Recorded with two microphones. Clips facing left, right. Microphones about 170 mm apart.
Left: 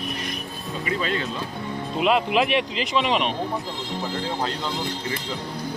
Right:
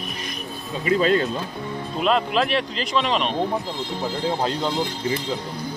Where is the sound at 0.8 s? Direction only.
40° right (ahead or behind).